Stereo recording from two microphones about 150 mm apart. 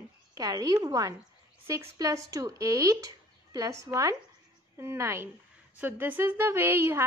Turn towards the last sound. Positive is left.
turn(degrees=-15)  # may be behind; listen again after turning